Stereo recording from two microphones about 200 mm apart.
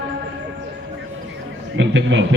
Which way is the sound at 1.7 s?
65° right (ahead or behind).